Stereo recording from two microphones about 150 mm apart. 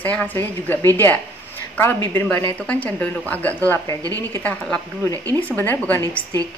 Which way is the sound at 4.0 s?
25° right (ahead or behind).